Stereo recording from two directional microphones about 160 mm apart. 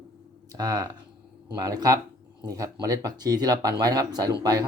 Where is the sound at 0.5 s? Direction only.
25° right (ahead or behind).